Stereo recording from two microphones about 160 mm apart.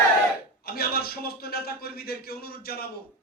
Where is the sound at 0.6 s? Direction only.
75° left (ahead or behind).